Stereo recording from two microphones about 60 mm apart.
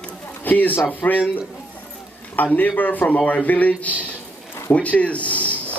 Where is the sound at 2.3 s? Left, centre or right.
Left.